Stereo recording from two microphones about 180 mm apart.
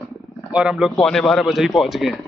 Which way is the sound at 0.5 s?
5° right (ahead or behind).